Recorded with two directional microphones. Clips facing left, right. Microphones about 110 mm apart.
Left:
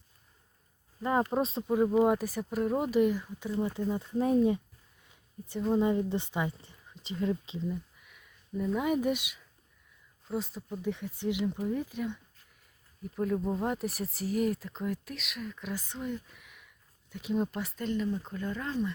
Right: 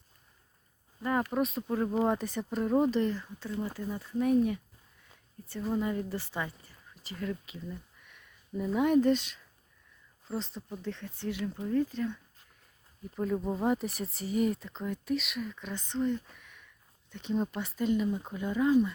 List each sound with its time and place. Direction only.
1.0 s speech: 25° left (ahead or behind)
1.6 s speech: 10° left (ahead or behind); by 4.6 s 25° left (ahead or behind)
5.7 s speech: 20° left (ahead or behind)
7.7 s a sound: 5° left (ahead or behind)
9.0 s speech: 10° left (ahead or behind)
13.1 s speech: centre (ahead or behind)